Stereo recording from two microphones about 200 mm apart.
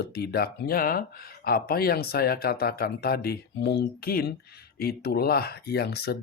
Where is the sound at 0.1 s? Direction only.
55° left (ahead or behind).